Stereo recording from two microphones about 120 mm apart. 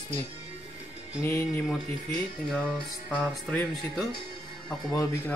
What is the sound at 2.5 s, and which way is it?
Speech, 5° left (ahead or behind).